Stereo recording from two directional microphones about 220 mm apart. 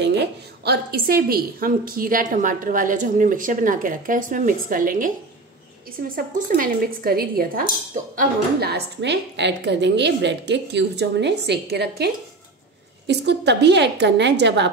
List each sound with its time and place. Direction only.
0.0 s a woman's voice: 50° right (ahead or behind)
6.1 s speech: 40° right (ahead or behind)